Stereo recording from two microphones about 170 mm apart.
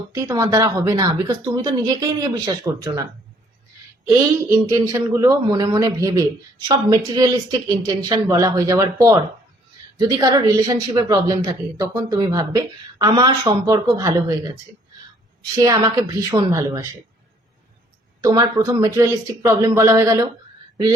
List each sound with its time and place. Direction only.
0.1 s speech: 20° right (ahead or behind)
4.9 s speech: 20° right (ahead or behind)
15.5 s speech: 20° right (ahead or behind)
18.2 s speech: 20° right (ahead or behind)